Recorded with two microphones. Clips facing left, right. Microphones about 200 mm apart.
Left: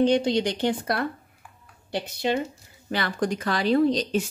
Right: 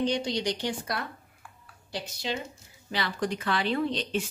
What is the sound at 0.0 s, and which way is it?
A woman's voice, 55° left (ahead or behind).